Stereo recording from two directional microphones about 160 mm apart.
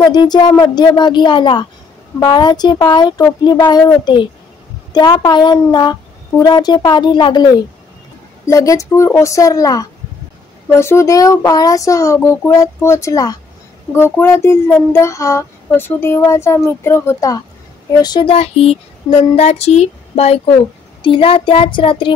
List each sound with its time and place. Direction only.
0.0 s speech: 25° left (ahead or behind)
13.9 s child singing: 15° left (ahead or behind)
17.9 s speech: 25° left (ahead or behind)
18.3 s speech: 40° left (ahead or behind)